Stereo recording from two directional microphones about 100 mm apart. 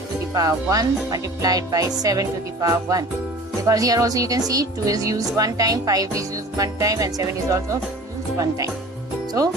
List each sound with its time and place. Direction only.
0.3 s speech: 35° right (ahead or behind)